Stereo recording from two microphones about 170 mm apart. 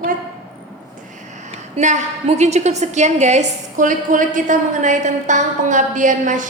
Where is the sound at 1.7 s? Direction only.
45° right (ahead or behind).